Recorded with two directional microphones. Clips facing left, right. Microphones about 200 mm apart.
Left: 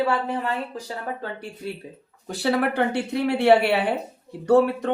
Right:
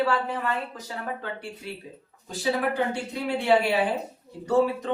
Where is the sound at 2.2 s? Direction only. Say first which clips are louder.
Left 3 dB; 70° left (ahead or behind).